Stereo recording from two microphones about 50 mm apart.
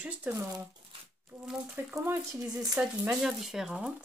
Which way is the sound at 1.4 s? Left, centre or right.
Centre.